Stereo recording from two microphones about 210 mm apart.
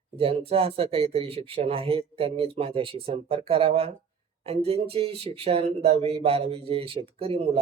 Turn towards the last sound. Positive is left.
turn(degrees=-30)  # may be behind; listen again after turning